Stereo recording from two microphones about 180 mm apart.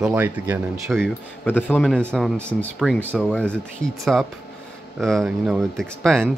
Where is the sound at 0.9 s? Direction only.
5° left (ahead or behind).